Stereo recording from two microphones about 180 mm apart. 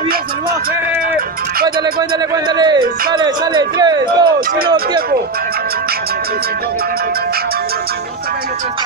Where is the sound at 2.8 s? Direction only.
55° right (ahead or behind).